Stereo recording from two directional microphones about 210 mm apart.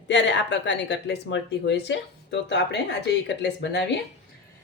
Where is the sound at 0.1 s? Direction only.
60° left (ahead or behind).